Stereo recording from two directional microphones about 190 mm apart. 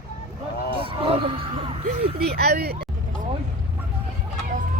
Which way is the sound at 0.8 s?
30° right (ahead or behind).